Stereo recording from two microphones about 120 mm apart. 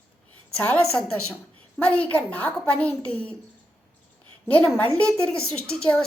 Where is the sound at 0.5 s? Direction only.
10° left (ahead or behind).